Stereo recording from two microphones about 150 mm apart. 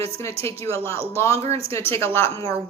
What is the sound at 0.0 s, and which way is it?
Speech, 20° left (ahead or behind).